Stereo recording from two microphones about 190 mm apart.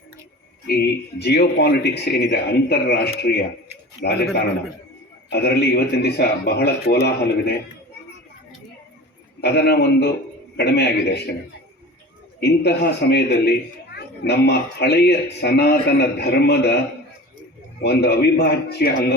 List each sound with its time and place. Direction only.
0.7 s speech: 60° left (ahead or behind)
5.3 s speech: 60° left (ahead or behind)
9.4 s speech: 55° left (ahead or behind)
12.4 s speech: 60° left (ahead or behind)
17.8 s speech: 60° left (ahead or behind)